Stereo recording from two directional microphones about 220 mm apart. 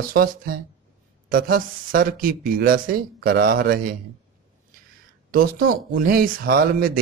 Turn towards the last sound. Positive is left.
turn(degrees=-40)  # may be behind; listen again after turning